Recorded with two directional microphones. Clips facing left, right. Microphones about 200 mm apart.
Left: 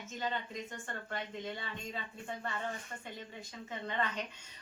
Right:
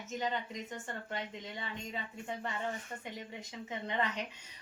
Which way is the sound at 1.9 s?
15° right (ahead or behind).